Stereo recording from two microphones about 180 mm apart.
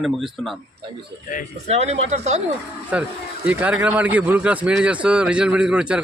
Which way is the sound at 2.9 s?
5° right (ahead or behind).